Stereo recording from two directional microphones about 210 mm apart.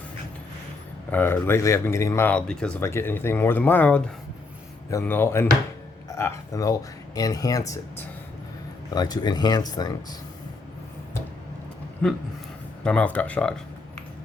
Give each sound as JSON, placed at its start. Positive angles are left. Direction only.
{"t": 1.1, "sound": "speech", "side_deg": 10}
{"t": 12.0, "sound": "speech", "side_deg": 5}